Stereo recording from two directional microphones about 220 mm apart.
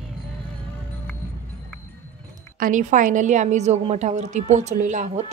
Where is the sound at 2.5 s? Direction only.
40° right (ahead or behind).